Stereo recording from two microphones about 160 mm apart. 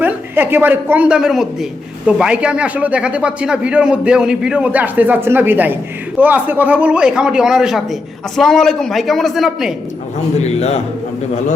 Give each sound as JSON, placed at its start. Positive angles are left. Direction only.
{"t": 0.0, "sound": "a man's voice", "side_deg": -10}
{"t": 10.3, "sound": "a man's voice", "side_deg": 45}